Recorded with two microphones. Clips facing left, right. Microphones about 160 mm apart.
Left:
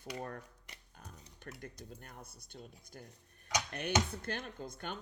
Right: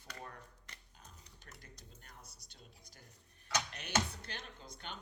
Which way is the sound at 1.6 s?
55° left (ahead or behind).